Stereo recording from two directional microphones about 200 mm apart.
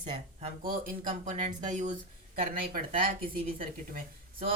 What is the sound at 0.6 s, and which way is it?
Speech, 45° right (ahead or behind).